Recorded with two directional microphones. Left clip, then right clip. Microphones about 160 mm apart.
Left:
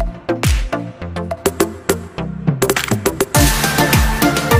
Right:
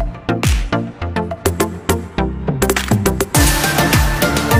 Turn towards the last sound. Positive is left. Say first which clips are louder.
# left 1 dB
turn(degrees=0)  # may be behind; listen again after turning